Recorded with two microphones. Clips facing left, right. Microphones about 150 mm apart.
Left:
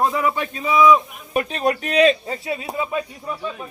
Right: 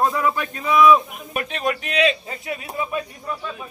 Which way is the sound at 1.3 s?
35° left (ahead or behind).